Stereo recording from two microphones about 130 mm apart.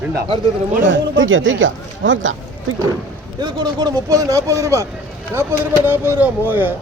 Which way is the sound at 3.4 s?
35° right (ahead or behind).